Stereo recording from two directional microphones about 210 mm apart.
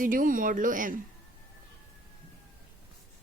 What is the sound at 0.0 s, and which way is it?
Speech, 40° right (ahead or behind).